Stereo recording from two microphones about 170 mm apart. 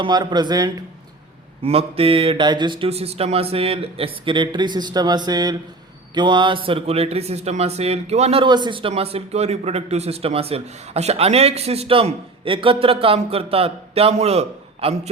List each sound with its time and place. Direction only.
0.0 s a man's voice: 25° right (ahead or behind)
1.6 s speech: 35° right (ahead or behind)